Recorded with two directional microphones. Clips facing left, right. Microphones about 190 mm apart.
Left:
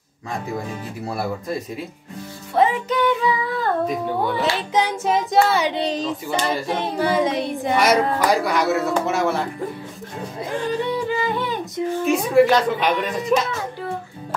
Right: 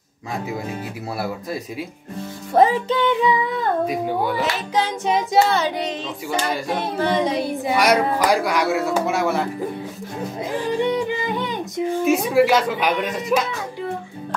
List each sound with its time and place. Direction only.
1.1 s speech: 5° right (ahead or behind)
2.5 s music: 40° right (ahead or behind)
2.9 s music: 20° right (ahead or behind)
3.8 s speech: 5° right (ahead or behind)
5.7 s speech: 30° left (ahead or behind)
6.7 s a sound: 20° left (ahead or behind)
7.1 s speech: centre (ahead or behind)
10.4 s a sound: 20° right (ahead or behind)
12.1 s speech: 5° right (ahead or behind)